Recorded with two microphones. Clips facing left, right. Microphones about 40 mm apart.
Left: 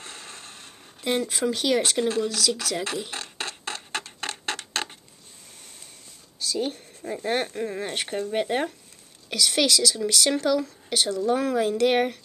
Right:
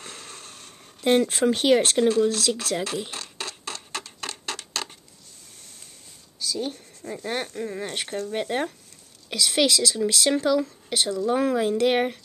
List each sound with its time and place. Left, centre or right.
0.0 s a sound: centre
1.0 s speech: right
3.1 s a sound: centre
6.4 s speech: centre
9.3 s speech: centre
11.3 s speech: centre